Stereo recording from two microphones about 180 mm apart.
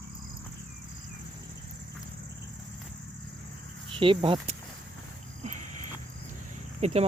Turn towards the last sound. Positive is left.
turn(degrees=-35)  # may be behind; listen again after turning